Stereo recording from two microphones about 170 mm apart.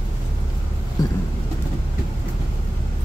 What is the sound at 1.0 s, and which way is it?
Vehicle, 25° left (ahead or behind).